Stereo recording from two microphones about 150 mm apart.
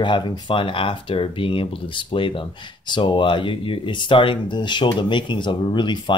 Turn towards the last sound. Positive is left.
turn(degrees=30)  # may be behind; listen again after turning